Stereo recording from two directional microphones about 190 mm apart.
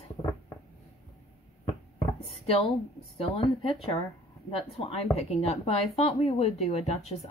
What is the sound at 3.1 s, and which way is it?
A woman's voice, 30° left (ahead or behind).